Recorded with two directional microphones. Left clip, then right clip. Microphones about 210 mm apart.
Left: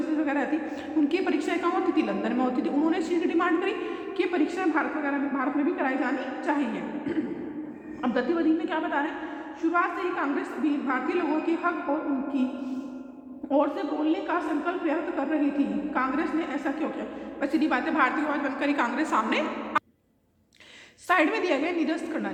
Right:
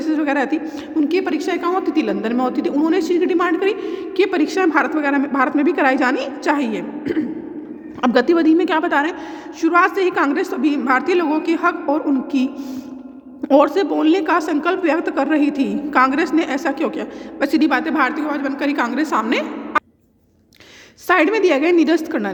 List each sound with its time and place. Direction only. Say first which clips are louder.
0.2 s a woman's voice: right 8 dB; 50° right (ahead or behind)
13.5 s a woman's voice: right 11 dB; 50° right (ahead or behind)
21.1 s a woman's voice: right 9 dB; 35° right (ahead or behind)